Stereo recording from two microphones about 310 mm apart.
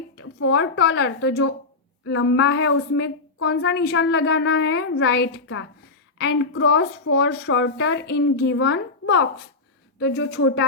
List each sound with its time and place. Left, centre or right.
0.2 s a woman's voice: left